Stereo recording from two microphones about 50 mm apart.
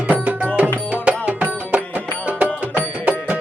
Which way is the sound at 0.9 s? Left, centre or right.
Right.